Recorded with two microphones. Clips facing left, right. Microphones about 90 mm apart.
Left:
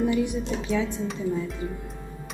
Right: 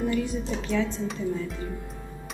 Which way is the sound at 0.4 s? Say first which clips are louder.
Left 1 dB; centre (ahead or behind).